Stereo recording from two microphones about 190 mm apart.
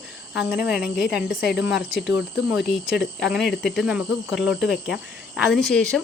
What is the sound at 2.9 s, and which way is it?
Speech, 60° left (ahead or behind).